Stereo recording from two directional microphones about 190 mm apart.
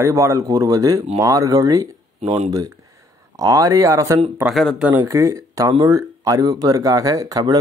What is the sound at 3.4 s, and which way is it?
Speech, 20° right (ahead or behind).